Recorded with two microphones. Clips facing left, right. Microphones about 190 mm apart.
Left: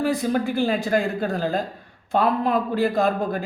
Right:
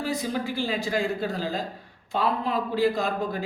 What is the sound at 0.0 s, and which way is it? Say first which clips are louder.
Speech: left 6 dB; 55° left (ahead or behind).